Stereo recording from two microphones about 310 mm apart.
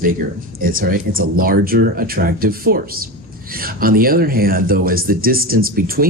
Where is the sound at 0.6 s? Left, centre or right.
Right.